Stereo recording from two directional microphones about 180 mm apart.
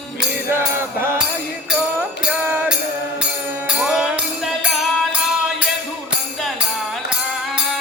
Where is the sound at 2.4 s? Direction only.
10° right (ahead or behind).